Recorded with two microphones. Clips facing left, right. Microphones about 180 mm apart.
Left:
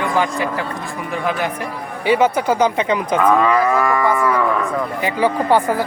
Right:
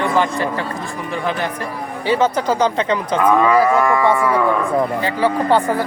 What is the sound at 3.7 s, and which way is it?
Moo, 5° right (ahead or behind).